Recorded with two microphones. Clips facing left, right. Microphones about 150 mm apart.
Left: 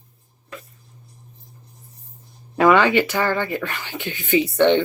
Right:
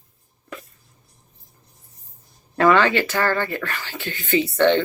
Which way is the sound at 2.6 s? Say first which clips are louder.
Left 2 dB; 15° left (ahead or behind).